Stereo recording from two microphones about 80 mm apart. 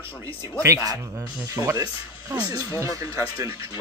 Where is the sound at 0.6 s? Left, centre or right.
Right.